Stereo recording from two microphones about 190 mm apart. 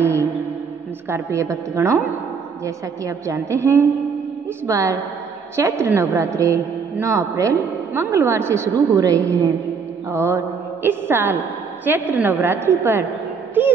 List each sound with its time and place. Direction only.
0.0 s mantra: 15° right (ahead or behind)
1.0 s a woman's voice: 15° right (ahead or behind)
10.1 s mantra: 15° right (ahead or behind)
11.8 s a woman's voice: 10° right (ahead or behind)